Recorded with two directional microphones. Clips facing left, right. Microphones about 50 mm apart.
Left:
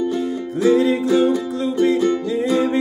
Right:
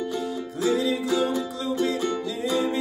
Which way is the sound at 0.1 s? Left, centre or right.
Left.